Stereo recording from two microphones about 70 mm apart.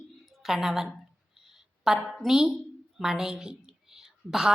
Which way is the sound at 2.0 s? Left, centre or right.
Centre.